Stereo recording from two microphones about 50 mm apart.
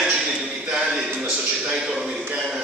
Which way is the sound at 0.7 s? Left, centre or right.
Centre.